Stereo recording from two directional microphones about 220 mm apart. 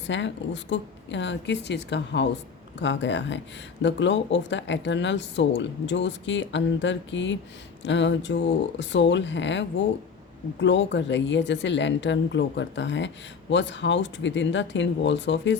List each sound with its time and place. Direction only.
0.1 s speech: 55° left (ahead or behind)